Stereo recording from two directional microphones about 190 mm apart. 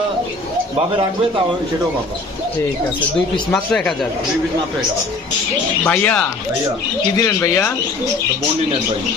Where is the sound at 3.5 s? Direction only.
5° left (ahead or behind).